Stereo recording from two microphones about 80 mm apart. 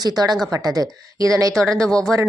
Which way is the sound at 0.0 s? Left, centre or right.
Right.